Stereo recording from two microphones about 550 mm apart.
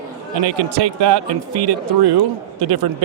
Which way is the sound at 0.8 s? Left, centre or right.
Right.